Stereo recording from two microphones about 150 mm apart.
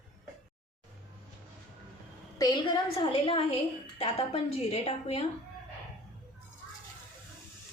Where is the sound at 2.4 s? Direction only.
30° left (ahead or behind).